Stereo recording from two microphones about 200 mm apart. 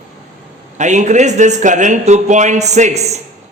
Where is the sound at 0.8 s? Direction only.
35° right (ahead or behind).